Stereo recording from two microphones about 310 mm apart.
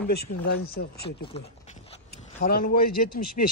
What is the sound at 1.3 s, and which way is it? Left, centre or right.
Zipper, left.